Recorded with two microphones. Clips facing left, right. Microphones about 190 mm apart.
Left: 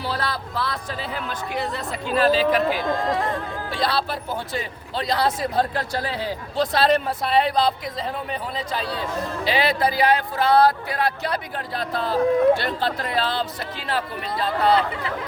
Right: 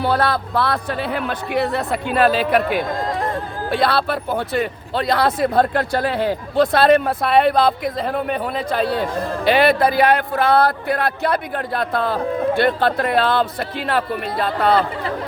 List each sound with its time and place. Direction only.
0.0 s speech: 60° right (ahead or behind)